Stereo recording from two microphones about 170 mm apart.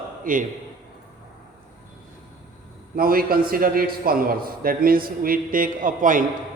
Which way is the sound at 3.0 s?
60° right (ahead or behind).